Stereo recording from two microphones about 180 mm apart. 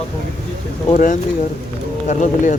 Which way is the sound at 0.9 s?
45° left (ahead or behind).